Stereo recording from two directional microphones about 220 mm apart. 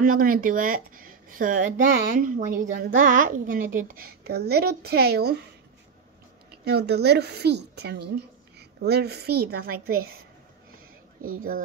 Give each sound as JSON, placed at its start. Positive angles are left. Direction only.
{"t": 0.0, "sound": "speech", "side_deg": -40}
{"t": 6.6, "sound": "a woman's voice", "side_deg": -50}
{"t": 11.2, "sound": "speech", "side_deg": -40}